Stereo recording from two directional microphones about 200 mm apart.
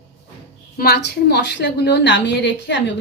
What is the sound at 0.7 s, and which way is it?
A woman's voice, 50° left (ahead or behind).